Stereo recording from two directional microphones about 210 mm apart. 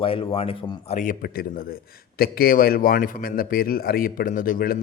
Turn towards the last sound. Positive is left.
turn(degrees=45)  # may be behind; listen again after turning